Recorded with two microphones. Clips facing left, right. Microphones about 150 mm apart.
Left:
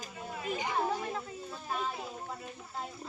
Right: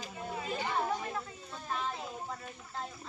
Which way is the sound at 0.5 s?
15° left (ahead or behind).